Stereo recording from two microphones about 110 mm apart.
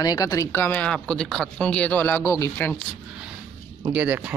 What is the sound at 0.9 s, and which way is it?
Speech, centre (ahead or behind).